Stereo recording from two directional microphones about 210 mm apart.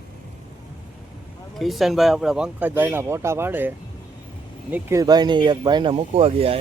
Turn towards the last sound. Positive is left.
turn(degrees=-30)  # may be behind; listen again after turning